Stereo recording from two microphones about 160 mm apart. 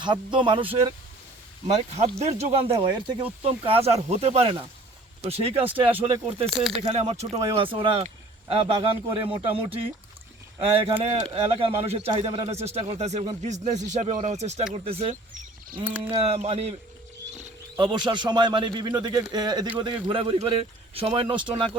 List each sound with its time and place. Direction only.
0.0 s speech: 30° right (ahead or behind)
2.0 s speech: 40° right (ahead or behind)
2.7 s speech: 30° right (ahead or behind)
6.5 s speech: centre (ahead or behind)
6.9 s speech: 40° right (ahead or behind)
15.1 s speech: 55° right (ahead or behind)
15.8 s speech: 10° right (ahead or behind)
16.0 s speech: 40° right (ahead or behind)
17.2 s a sound: 45° right (ahead or behind)
17.7 s speech: 30° right (ahead or behind)